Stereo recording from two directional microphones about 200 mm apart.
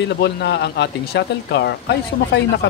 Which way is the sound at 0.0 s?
55° left (ahead or behind).